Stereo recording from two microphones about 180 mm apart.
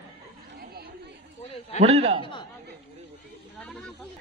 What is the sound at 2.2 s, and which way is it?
Speech, 25° left (ahead or behind).